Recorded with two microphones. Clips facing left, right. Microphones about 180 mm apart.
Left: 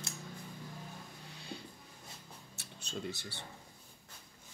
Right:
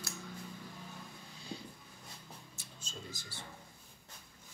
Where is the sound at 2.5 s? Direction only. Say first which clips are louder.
Left 9 dB; 65° left (ahead or behind).